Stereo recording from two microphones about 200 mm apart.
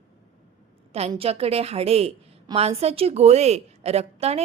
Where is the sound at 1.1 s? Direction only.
30° right (ahead or behind).